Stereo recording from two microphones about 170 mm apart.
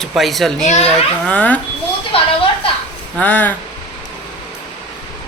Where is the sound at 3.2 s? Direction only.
10° left (ahead or behind).